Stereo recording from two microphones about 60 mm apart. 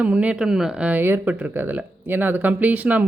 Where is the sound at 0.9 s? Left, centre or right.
Right.